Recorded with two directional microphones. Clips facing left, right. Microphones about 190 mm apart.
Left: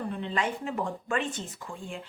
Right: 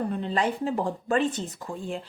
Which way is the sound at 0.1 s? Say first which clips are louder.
Right 4 dB; 40° right (ahead or behind).